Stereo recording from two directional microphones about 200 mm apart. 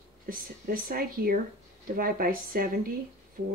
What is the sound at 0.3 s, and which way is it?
Speech, 45° right (ahead or behind).